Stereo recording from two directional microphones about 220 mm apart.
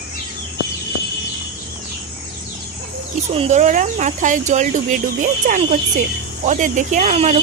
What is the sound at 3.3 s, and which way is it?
Speech, 30° right (ahead or behind).